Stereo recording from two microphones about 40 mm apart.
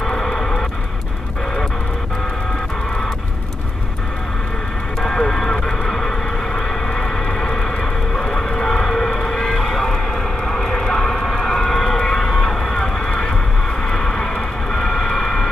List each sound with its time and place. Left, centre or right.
0.0 s music: centre
5.0 s vehicle: centre
6.9 s a sound: centre
13.8 s vehicle: centre